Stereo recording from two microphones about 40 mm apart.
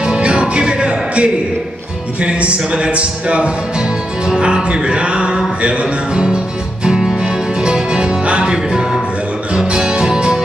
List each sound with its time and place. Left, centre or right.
0.0 s music: right
7.0 s music: centre